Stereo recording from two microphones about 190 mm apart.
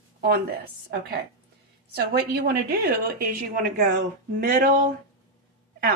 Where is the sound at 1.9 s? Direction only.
50° right (ahead or behind).